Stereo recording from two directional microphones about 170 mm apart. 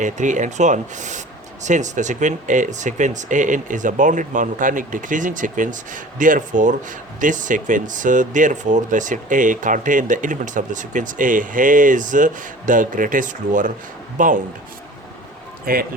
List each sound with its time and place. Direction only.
0.0 s speech: 45° right (ahead or behind)
15.6 s speech: 60° right (ahead or behind)